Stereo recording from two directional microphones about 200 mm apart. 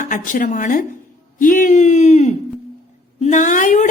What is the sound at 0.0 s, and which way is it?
Speech, 40° left (ahead or behind).